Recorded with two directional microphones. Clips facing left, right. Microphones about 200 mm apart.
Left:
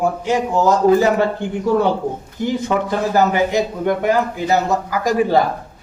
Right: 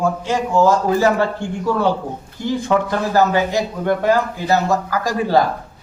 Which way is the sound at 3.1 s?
15° left (ahead or behind).